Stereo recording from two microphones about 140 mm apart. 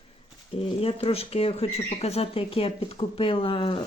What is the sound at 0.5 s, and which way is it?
Speech, 45° left (ahead or behind).